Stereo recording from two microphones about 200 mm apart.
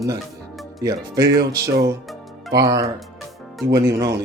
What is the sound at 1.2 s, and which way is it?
Music, 55° right (ahead or behind).